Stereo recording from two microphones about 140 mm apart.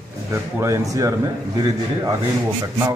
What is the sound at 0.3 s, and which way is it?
Speech, 20° right (ahead or behind).